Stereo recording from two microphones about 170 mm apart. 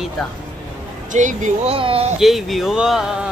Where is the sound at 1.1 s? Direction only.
45° right (ahead or behind).